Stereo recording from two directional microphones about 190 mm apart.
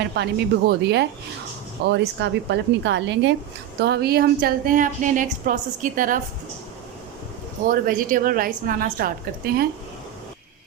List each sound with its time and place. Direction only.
0.1 s a woman's voice: 60° right (ahead or behind); by 6.1 s 45° right (ahead or behind)
7.7 s a woman's voice: 45° right (ahead or behind)